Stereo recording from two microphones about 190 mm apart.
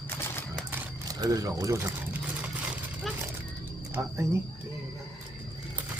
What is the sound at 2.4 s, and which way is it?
Vehicle, 5° right (ahead or behind).